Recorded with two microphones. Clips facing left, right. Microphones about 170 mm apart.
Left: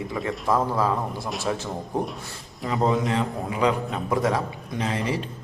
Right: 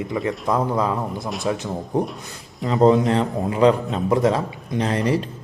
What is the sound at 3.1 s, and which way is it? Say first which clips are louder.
Speech: right 5 dB; 30° right (ahead or behind).